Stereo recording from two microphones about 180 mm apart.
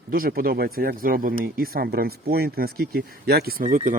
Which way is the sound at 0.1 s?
55° right (ahead or behind).